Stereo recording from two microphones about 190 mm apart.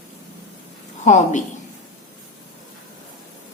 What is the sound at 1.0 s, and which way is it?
Speech, 40° left (ahead or behind).